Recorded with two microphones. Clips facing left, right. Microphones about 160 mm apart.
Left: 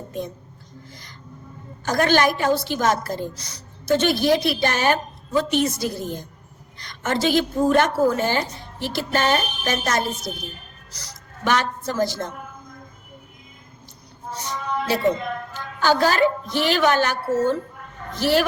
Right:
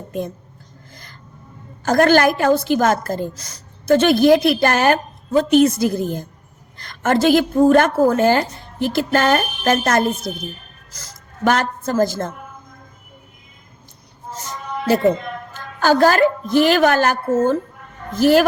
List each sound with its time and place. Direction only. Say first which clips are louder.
1.8 s a woman's voice: right 5 dB; 50° right (ahead or behind)
15.8 s a woman's voice: right 4 dB; 50° right (ahead or behind)